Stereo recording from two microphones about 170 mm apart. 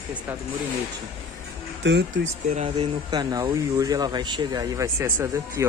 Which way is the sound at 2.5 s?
35° right (ahead or behind).